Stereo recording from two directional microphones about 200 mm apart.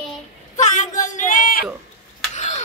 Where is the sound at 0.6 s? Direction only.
40° left (ahead or behind).